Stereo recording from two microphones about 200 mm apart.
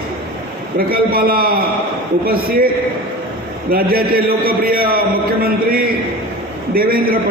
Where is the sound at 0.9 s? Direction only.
50° right (ahead or behind).